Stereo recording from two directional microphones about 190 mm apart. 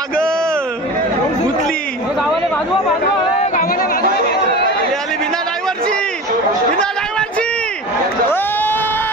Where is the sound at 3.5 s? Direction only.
50° left (ahead or behind).